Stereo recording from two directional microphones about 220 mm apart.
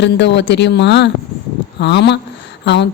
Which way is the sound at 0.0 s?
50° left (ahead or behind).